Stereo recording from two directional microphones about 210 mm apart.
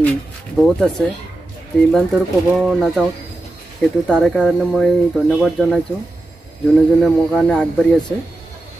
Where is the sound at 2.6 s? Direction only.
Centre (ahead or behind).